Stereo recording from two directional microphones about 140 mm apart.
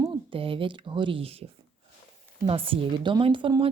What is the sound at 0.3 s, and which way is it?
A woman's voice, 40° right (ahead or behind).